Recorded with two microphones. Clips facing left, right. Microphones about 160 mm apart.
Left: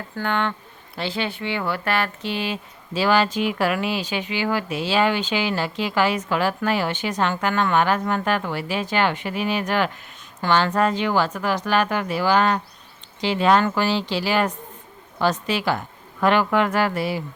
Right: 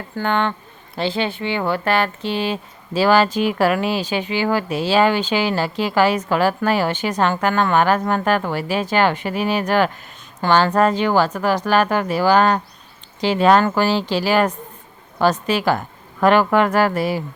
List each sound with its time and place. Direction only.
0.2 s a woman's voice: 25° right (ahead or behind); by 17.2 s 45° right (ahead or behind)